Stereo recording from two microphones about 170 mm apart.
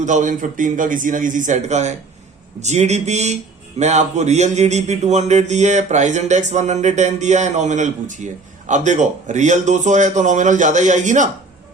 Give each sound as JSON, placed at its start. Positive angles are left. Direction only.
{"t": 0.0, "sound": "speech", "side_deg": -45}